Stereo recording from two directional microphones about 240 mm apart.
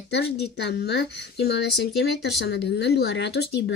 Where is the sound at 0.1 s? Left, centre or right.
Left.